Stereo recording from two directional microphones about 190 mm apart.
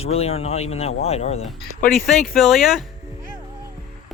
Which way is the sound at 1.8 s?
Centre (ahead or behind).